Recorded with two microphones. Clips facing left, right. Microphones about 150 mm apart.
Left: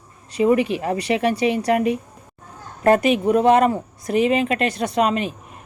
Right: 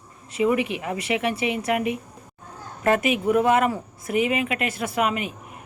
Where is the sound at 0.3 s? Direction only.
30° left (ahead or behind).